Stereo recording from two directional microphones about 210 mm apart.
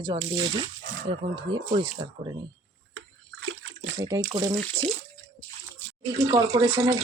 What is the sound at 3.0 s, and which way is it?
Bathtub, 75° right (ahead or behind).